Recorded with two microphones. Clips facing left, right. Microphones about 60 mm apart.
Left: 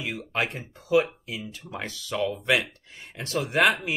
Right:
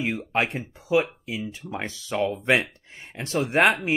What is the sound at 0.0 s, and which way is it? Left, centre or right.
Speech, right.